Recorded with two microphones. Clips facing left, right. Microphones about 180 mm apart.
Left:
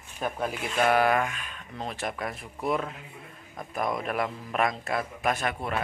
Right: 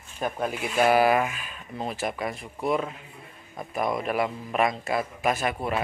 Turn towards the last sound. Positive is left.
turn(degrees=-5)  # may be behind; listen again after turning